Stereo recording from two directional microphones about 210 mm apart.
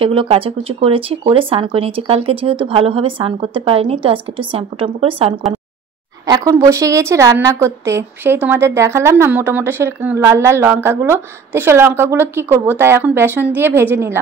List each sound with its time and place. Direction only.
0.0 s a woman's voice: 25° right (ahead or behind); by 14.1 s 10° right (ahead or behind)